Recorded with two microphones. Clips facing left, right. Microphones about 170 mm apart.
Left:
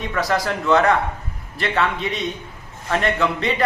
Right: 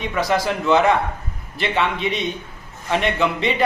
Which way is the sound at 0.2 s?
Centre (ahead or behind).